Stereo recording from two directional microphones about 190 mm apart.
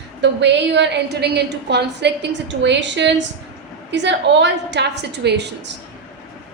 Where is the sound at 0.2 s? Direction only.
65° right (ahead or behind).